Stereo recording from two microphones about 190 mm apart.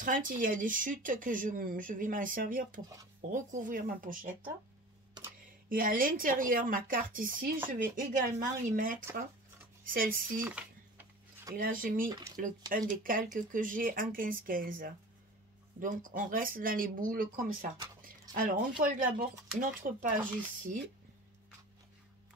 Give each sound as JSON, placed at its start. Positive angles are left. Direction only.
{"t": 0.0, "sound": "speech", "side_deg": -45}
{"t": 5.7, "sound": "speech", "side_deg": -45}
{"t": 11.5, "sound": "speech", "side_deg": -50}
{"t": 12.1, "sound": "speech", "side_deg": -20}
{"t": 12.4, "sound": "speech", "side_deg": -45}
{"t": 16.1, "sound": "speech", "side_deg": -45}